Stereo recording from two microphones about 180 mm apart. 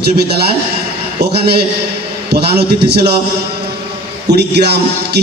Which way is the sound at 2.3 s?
65° right (ahead or behind).